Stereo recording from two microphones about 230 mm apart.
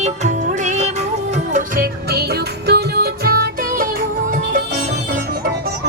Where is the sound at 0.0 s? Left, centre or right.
Right.